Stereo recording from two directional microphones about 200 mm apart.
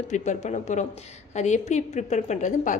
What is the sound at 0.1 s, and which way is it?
A woman's voice, 35° left (ahead or behind).